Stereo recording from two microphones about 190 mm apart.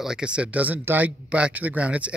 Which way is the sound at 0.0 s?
5° right (ahead or behind).